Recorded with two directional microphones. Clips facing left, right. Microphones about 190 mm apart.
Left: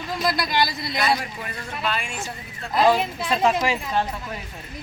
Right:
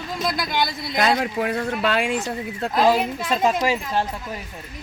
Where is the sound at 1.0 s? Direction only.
80° right.